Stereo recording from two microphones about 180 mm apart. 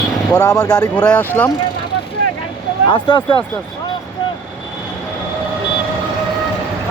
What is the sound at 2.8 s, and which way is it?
Speech, 25° left (ahead or behind).